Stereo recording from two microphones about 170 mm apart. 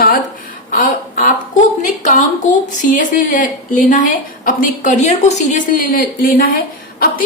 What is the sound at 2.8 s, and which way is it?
A woman's voice, 50° left (ahead or behind).